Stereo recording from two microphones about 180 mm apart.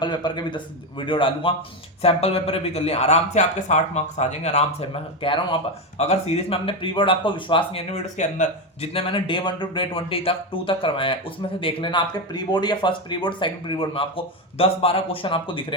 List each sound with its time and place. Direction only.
0.0 s speech: 25° left (ahead or behind)